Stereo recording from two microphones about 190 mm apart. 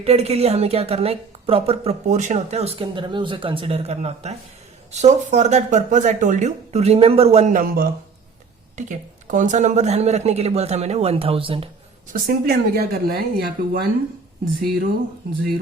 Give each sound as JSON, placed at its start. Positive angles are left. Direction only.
{"t": 0.0, "sound": "a woman's voice", "side_deg": -30}
{"t": 12.1, "sound": "speech", "side_deg": -55}